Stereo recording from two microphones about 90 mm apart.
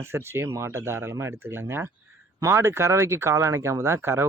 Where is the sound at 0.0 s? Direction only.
30° right (ahead or behind).